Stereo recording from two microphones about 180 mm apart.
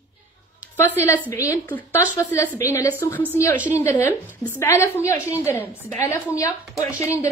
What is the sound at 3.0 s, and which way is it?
Speech, 10° left (ahead or behind).